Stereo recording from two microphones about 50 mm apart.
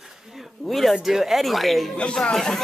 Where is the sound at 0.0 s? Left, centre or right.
Centre.